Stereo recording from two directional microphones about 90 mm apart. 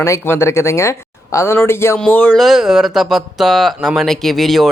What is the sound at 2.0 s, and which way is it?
Speech, 15° left (ahead or behind).